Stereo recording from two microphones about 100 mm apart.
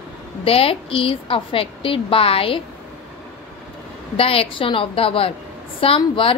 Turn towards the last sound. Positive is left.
turn(degrees=65)  # may be behind; listen again after turning